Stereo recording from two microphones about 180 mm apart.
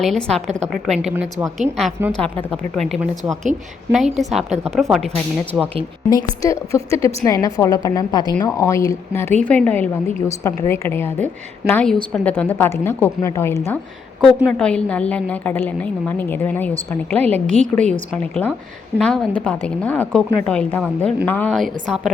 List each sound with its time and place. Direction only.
0.0 s a woman's voice: 5° left (ahead or behind)
2.1 s a woman's voice: 5° left (ahead or behind)
4.4 s a woman's voice: 35° right (ahead or behind)
4.7 s a woman's voice: centre (ahead or behind)
6.1 s a woman's voice: 20° left (ahead or behind)
14.2 s a woman's voice: centre (ahead or behind)